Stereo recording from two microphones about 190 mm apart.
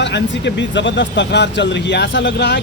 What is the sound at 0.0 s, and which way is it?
Speech, 65° left (ahead or behind).